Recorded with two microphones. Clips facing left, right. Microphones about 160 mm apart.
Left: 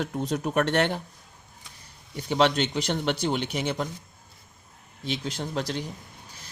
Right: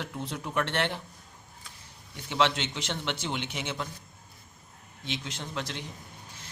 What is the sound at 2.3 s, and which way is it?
A man's voice, 40° left (ahead or behind).